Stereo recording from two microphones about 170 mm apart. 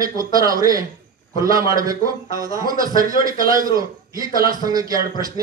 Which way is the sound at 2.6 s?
55° right (ahead or behind).